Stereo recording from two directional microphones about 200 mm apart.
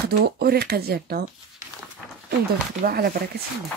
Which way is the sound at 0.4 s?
50° right (ahead or behind).